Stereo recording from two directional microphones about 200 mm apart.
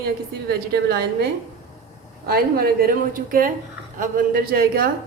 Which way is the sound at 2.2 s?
50° right (ahead or behind).